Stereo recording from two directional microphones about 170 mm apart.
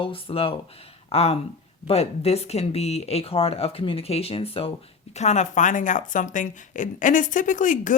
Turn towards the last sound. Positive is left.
turn(degrees=50)  # may be behind; listen again after turning